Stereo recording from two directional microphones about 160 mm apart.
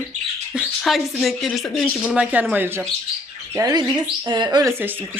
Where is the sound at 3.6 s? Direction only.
25° right (ahead or behind).